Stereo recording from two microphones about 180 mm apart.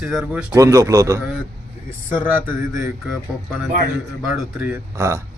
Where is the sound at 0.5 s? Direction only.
20° right (ahead or behind).